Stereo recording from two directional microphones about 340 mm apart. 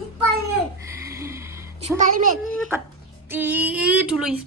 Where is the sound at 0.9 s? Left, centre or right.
Centre.